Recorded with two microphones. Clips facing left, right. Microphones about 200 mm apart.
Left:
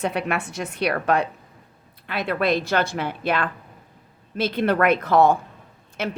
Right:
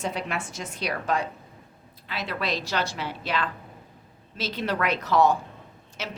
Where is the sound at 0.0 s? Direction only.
60° left (ahead or behind).